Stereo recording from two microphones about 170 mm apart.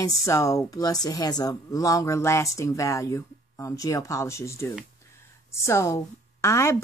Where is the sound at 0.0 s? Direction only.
15° left (ahead or behind).